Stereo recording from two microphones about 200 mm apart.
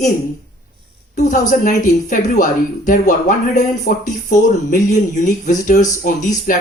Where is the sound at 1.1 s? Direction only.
40° left (ahead or behind).